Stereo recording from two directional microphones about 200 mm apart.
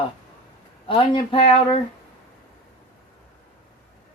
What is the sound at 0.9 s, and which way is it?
Speech, 25° left (ahead or behind).